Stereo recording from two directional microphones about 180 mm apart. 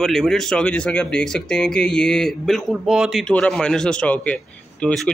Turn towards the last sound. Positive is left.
turn(degrees=5)  # may be behind; listen again after turning